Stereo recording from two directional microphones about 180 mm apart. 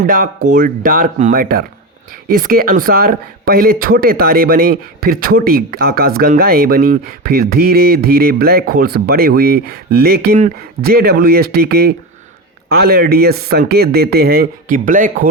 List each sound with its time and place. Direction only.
0.0 s speech: 50° right (ahead or behind)